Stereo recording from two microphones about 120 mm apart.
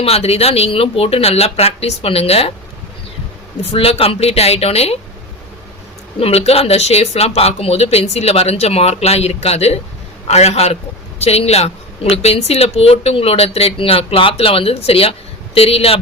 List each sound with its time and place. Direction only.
0.0 s a woman's voice: 55° left (ahead or behind)
3.6 s a woman's voice: 55° left (ahead or behind)
6.1 s a woman's voice: 55° left (ahead or behind)